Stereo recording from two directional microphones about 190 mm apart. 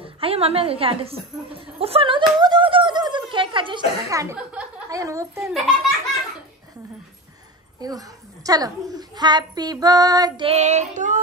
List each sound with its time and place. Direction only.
0.0 s a woman's voice: 30° right (ahead or behind); by 5.5 s 15° right (ahead or behind)
5.5 s a child's voice: centre (ahead or behind)
7.8 s a woman's voice: 20° right (ahead or behind); by 11.1 s 40° right (ahead or behind)